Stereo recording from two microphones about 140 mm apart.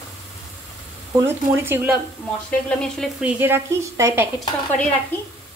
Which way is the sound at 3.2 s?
15° right (ahead or behind).